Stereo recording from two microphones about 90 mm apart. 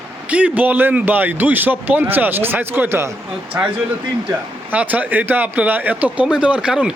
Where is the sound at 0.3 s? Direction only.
15° right (ahead or behind).